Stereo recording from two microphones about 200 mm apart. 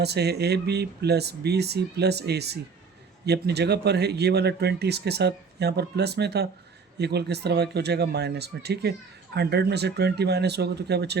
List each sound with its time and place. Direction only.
0.0 s speech: 55° right (ahead or behind)